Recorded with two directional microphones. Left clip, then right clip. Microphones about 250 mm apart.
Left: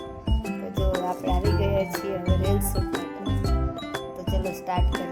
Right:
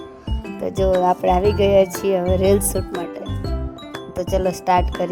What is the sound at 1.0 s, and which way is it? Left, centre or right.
Music, right.